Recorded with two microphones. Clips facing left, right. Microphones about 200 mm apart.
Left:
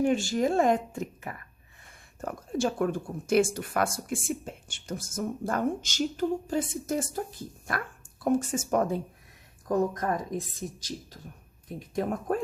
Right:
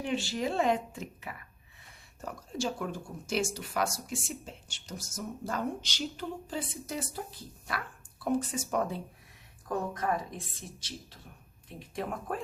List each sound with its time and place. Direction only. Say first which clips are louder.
0.0 s speech: left 7 dB; 45° left (ahead or behind)
11.8 s speech: left 6 dB; 45° left (ahead or behind)